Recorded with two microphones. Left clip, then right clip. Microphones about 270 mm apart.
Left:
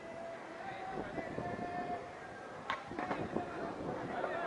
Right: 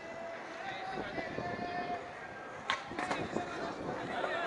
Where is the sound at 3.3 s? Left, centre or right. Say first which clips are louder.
Right 2 dB; centre.